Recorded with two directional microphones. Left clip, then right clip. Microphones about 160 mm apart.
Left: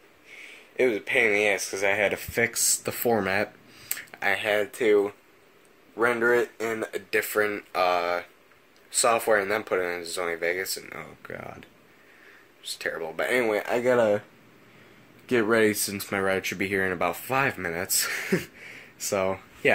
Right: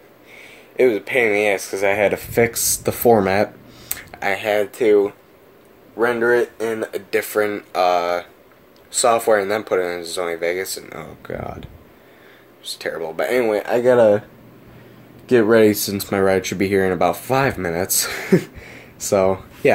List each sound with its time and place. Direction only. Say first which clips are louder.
0.3 s speech: right 3 dB; 15° right (ahead or behind); by 7.0 s 5° left (ahead or behind)
7.1 s speech: right 5 dB; 10° right (ahead or behind)
12.6 s speech: right 6 dB; 10° right (ahead or behind); by 14.2 s 5° left (ahead or behind)
15.2 s speech: right 9 dB; 5° left (ahead or behind); by 19.7 s 10° right (ahead or behind)